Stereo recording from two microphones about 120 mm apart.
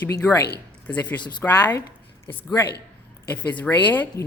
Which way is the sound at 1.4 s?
15° left (ahead or behind).